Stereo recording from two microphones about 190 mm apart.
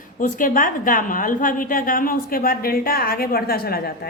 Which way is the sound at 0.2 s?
45° left (ahead or behind).